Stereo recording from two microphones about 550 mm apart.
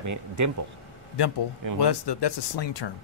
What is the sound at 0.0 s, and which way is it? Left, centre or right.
Speech, right.